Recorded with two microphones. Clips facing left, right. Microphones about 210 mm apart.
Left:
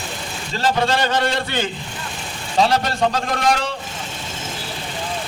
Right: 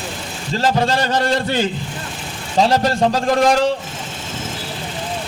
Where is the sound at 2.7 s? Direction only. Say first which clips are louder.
Right 3 dB; 40° right (ahead or behind).